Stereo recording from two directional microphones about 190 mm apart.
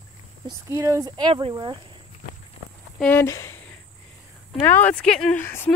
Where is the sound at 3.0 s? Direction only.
10° left (ahead or behind).